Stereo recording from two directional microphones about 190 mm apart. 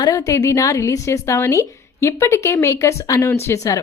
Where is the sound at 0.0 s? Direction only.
15° left (ahead or behind).